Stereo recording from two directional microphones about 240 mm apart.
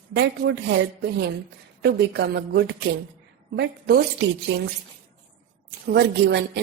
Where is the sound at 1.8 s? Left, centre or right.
Right.